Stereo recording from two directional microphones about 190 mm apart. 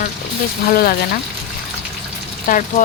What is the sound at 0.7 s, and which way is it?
Speech, 50° left (ahead or behind).